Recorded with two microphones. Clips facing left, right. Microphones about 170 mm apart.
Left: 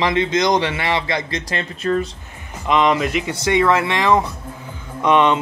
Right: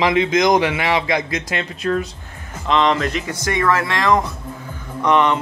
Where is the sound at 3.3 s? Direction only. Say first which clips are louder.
Left 4 dB; 20° left (ahead or behind).